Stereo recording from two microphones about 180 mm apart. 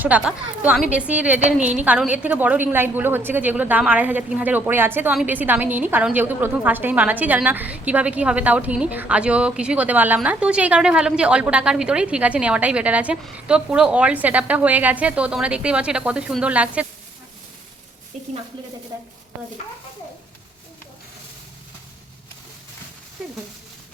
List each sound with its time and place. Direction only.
0.0 s a woman's voice: 10° right (ahead or behind)